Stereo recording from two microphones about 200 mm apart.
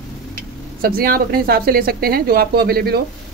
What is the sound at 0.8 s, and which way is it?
Speech, 45° right (ahead or behind).